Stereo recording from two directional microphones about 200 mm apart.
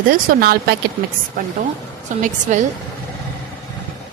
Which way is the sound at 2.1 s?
35° right (ahead or behind).